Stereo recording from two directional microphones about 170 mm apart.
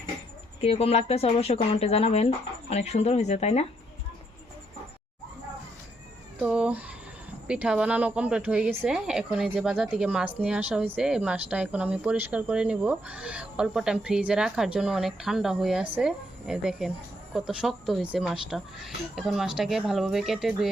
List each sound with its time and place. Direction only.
0.6 s speech: 35° left (ahead or behind)
6.4 s speech: 5° right (ahead or behind)